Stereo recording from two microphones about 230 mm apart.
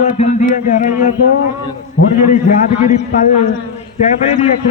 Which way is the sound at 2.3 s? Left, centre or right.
Left.